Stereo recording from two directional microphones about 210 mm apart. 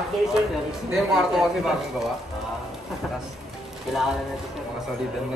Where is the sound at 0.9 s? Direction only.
Centre (ahead or behind).